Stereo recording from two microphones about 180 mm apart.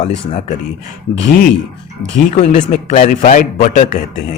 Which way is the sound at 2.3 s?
40° left (ahead or behind).